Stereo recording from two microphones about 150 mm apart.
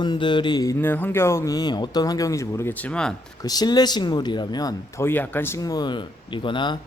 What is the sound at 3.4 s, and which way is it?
Speech, 25° left (ahead or behind).